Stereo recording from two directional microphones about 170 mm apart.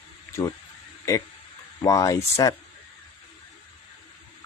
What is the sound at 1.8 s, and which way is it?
Speech, 20° left (ahead or behind).